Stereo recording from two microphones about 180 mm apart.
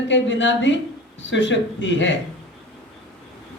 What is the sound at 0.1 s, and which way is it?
Speech, 85° left.